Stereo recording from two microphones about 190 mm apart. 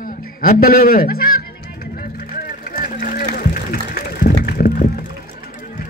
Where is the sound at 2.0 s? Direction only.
50° left (ahead or behind).